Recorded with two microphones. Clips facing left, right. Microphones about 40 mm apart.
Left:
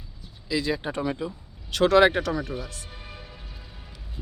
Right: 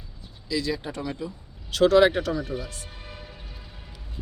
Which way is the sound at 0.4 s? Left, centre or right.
Left.